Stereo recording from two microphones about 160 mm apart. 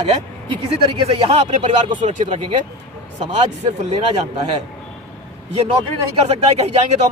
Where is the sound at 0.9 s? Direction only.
35° right (ahead or behind).